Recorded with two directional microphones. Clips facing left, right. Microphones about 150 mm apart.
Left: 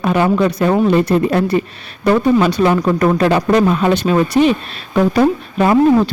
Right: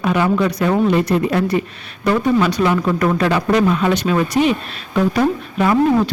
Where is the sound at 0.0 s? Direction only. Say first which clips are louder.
Left 3 dB; 40° left (ahead or behind).